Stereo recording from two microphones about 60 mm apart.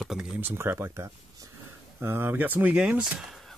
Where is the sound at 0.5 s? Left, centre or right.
Right.